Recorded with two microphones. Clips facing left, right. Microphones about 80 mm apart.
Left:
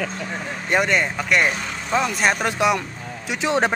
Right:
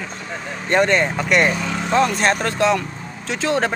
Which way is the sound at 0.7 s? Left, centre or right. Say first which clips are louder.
Right 3 dB; centre.